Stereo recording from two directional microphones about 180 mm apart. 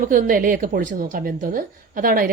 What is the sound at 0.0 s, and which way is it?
Speech, 50° right (ahead or behind).